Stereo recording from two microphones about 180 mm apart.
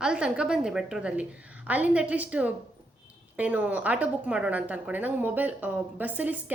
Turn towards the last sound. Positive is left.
turn(degrees=-10)  # may be behind; listen again after turning